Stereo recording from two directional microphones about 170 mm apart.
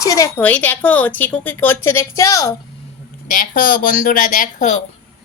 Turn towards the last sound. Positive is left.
turn(degrees=50)  # may be behind; listen again after turning